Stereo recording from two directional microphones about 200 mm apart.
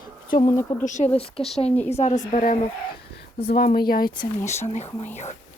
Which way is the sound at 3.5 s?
50° left (ahead or behind).